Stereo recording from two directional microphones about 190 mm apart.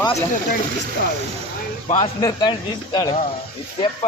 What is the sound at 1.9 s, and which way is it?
Speech, 20° left (ahead or behind).